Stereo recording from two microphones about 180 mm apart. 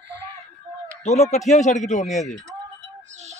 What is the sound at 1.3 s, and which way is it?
Speech, 40° left (ahead or behind).